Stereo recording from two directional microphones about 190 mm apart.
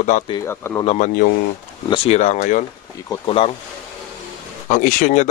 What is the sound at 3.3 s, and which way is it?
Speech, 30° left (ahead or behind).